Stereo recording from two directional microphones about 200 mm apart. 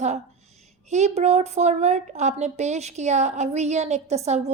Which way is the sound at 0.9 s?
35° right (ahead or behind).